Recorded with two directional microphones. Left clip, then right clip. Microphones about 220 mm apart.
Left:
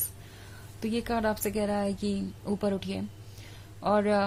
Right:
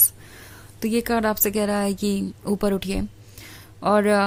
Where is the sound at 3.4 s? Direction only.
35° right (ahead or behind).